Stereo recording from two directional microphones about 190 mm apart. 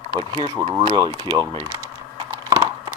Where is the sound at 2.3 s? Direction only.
15° right (ahead or behind).